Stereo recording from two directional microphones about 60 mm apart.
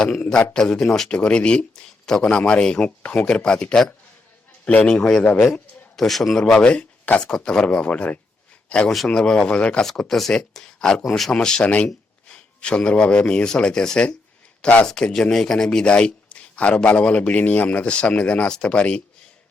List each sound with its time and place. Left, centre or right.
0.0 s speech: centre
6.1 s a man's voice: centre
6.4 s speech: centre
9.8 s speech: centre; by 14.8 s left
14.8 s speech: centre